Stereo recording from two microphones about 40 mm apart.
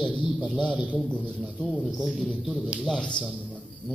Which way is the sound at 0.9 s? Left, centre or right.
Left.